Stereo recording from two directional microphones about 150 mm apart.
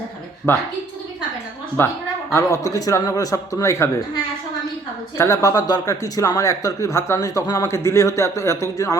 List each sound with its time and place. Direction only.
0.5 s a woman's voice: 15° left (ahead or behind)
1.8 s a woman's voice: 15° left (ahead or behind)
5.1 s speech: 20° left (ahead or behind)